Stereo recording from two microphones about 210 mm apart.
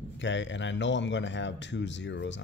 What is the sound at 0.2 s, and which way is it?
Speech, 60° left (ahead or behind).